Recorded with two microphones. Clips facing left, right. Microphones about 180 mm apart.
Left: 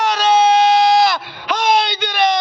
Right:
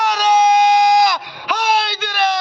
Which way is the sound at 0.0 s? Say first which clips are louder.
Even; 10° right (ahead or behind).